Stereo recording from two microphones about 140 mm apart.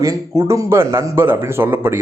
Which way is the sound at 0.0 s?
20° right (ahead or behind).